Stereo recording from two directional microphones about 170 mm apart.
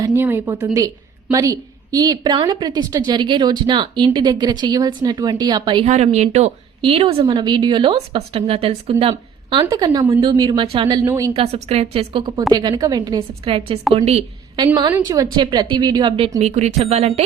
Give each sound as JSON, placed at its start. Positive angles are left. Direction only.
{"t": 0.0, "sound": "a woman's voice", "side_deg": -15}
{"t": 5.8, "sound": "speech", "side_deg": -40}
{"t": 11.0, "sound": "a woman's voice", "side_deg": -15}
{"t": 11.3, "sound": "speech", "side_deg": -35}
{"t": 12.4, "sound": "a woman's voice", "side_deg": -20}
{"t": 16.4, "sound": "speech", "side_deg": -40}